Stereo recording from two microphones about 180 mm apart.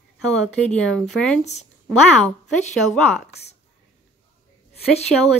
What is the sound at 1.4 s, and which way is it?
Speech, 40° left (ahead or behind).